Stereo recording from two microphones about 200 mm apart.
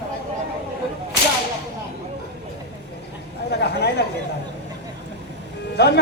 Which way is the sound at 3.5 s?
55° left (ahead or behind).